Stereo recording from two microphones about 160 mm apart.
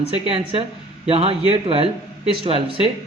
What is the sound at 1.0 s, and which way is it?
Speech, 35° right (ahead or behind).